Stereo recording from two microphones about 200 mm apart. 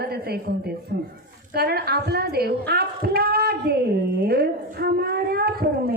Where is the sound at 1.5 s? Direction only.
50° right (ahead or behind).